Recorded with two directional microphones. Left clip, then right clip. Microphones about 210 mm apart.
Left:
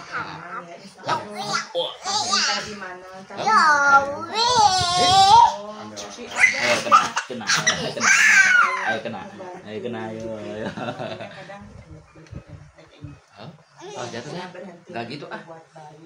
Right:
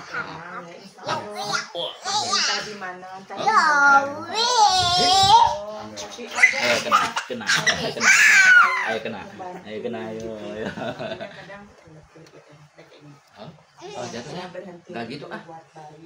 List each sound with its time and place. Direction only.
1.3 s music: 5° right (ahead or behind)
2.0 s a sound: 5° right (ahead or behind)
3.4 s a child's voice: 5° right (ahead or behind)
8.0 s baby cry: 15° right (ahead or behind)
9.9 s speech: 5° left (ahead or behind)
14.9 s a man's voice: 20° left (ahead or behind)